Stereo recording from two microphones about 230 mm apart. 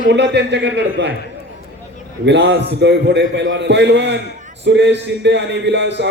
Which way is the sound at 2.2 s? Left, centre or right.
Right.